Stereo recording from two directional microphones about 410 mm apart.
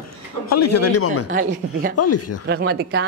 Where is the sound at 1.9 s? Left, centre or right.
Left.